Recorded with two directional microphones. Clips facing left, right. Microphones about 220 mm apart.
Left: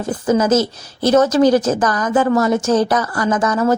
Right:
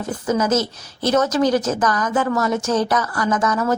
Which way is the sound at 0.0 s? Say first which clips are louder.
Left 4 dB; 30° left (ahead or behind).